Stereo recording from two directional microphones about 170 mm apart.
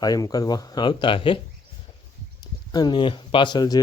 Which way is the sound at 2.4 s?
25° left (ahead or behind).